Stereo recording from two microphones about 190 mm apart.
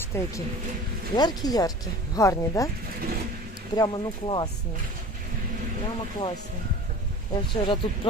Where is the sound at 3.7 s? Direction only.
25° left (ahead or behind).